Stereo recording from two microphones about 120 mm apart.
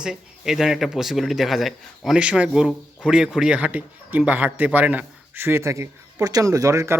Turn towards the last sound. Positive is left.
turn(degrees=-25)  # may be behind; listen again after turning